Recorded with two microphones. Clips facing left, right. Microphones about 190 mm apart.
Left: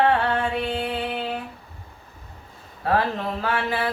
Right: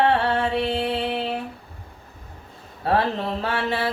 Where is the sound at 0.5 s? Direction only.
30° right (ahead or behind).